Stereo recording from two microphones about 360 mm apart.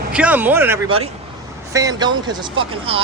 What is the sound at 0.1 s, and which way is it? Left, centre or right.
Speech, centre.